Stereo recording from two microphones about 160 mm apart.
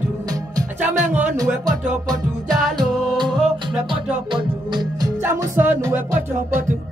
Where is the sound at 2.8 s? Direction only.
Centre (ahead or behind).